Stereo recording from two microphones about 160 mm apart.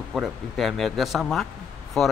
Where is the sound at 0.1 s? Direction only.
Centre (ahead or behind).